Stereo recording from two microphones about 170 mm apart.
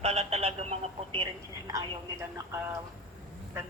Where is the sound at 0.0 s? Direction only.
40° right (ahead or behind).